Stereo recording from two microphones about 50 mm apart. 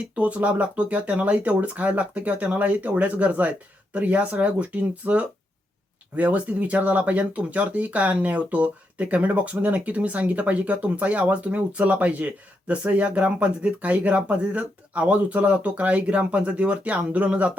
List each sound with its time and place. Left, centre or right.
0.2 s speech: right